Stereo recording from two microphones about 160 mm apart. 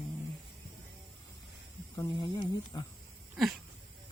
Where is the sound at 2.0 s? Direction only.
25° left (ahead or behind).